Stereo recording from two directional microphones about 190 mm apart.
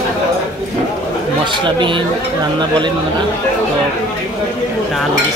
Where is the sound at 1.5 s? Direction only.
25° right (ahead or behind).